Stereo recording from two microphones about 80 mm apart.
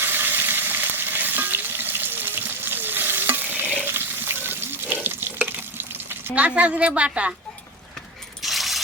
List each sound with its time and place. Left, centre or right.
0.0 s frying: right
3.8 s toilet flush: right
5.5 s water: right
6.3 s a woman's voice: centre
8.4 s mechanisms: centre